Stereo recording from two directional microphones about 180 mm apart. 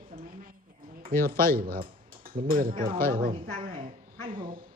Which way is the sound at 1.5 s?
55° right (ahead or behind).